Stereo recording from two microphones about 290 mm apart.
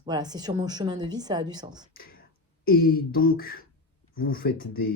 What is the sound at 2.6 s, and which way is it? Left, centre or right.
Speech, left.